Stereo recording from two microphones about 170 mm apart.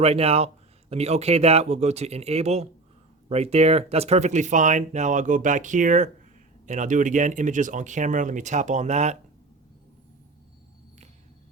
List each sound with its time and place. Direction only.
0.0 s speech: 35° right (ahead or behind)